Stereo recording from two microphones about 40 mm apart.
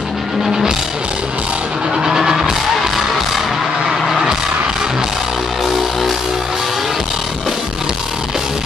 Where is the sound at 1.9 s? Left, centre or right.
Centre.